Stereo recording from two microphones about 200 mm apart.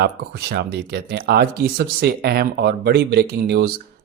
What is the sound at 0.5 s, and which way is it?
Speech, 55° right (ahead or behind).